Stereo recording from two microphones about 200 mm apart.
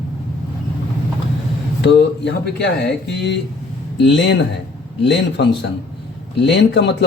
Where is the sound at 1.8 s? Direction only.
60° left (ahead or behind).